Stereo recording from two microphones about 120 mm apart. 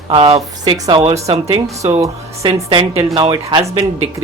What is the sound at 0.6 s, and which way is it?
Speech, 40° right (ahead or behind).